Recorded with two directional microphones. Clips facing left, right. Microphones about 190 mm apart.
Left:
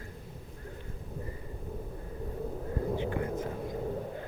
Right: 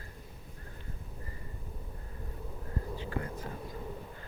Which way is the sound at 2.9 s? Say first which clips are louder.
Left 3 dB; 20° left (ahead or behind).